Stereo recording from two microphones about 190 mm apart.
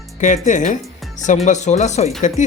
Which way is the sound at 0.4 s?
40° left (ahead or behind).